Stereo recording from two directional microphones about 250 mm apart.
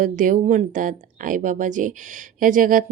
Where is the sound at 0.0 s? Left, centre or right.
Right.